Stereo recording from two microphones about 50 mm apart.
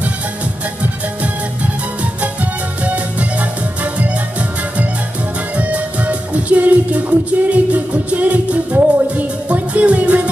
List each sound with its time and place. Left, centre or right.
2.8 s music: right